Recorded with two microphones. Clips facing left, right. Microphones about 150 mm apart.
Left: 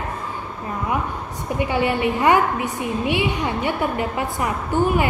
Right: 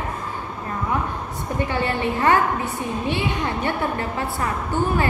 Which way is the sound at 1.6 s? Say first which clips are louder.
Left 3 dB; 15° left (ahead or behind).